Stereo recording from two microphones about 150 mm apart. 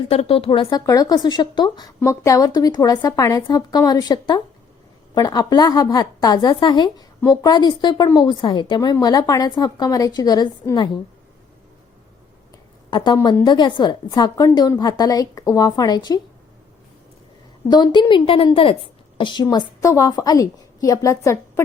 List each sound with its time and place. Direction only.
0.1 s a woman's voice: 40° left (ahead or behind)
0.9 s a woman's voice: 25° left (ahead or behind)
13.4 s a woman's voice: 30° left (ahead or behind)
17.7 s a woman's voice: 30° left (ahead or behind)